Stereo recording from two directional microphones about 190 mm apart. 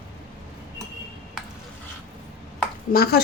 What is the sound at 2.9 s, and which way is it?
Speech, 55° left (ahead or behind).